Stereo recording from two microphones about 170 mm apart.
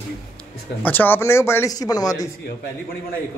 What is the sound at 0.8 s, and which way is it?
A woman's voice, 10° left (ahead or behind).